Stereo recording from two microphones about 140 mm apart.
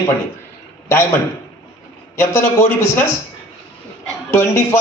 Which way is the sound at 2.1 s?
15° left (ahead or behind).